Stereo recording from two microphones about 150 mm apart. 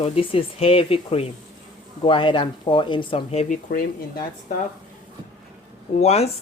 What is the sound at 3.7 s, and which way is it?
Speech, 70° left (ahead or behind).